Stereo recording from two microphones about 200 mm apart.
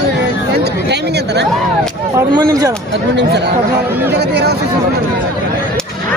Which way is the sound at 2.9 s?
60° right (ahead or behind).